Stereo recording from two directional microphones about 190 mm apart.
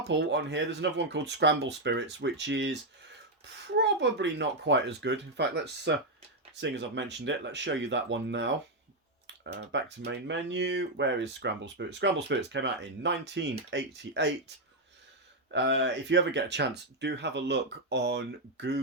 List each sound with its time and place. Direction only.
0.1 s speech: 70° right (ahead or behind)
15.5 s speech: 70° right (ahead or behind)